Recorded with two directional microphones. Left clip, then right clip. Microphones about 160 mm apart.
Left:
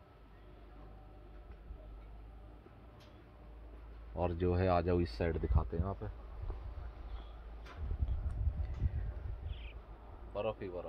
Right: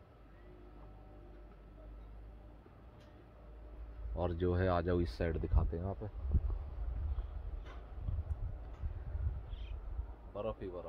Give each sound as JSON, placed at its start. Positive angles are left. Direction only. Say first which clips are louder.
{"t": 4.1, "sound": "speech", "louder": "left 1 dB", "side_deg": 0}
{"t": 10.3, "sound": "speech", "louder": "left 3 dB", "side_deg": 40}